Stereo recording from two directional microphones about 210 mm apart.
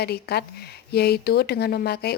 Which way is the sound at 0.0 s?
50° left (ahead or behind).